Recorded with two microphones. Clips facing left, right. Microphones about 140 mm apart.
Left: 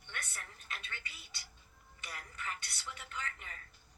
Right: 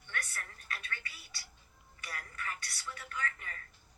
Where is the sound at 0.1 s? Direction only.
20° left (ahead or behind).